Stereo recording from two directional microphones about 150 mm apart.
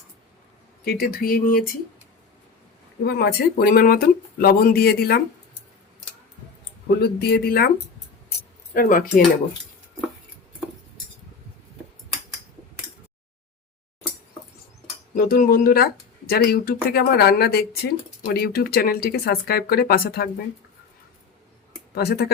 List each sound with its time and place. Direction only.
0.9 s speech: 75° left (ahead or behind)
3.0 s speech: 90° left
7.0 s speech: 90° left
8.7 s speech: 70° left (ahead or behind)
15.1 s speech: 75° left (ahead or behind)
21.9 s speech: 90° left